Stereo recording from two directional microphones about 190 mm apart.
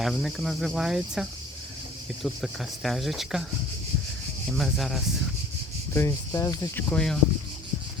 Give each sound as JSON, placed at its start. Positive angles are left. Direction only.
{"t": 0.0, "sound": "cricket", "side_deg": 0}
{"t": 4.5, "sound": "cricket", "side_deg": 0}
{"t": 5.9, "sound": "speech", "side_deg": 15}
{"t": 6.9, "sound": "cricket", "side_deg": 5}